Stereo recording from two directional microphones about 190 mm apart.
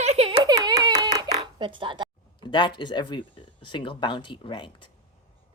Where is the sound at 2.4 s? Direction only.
25° left (ahead or behind).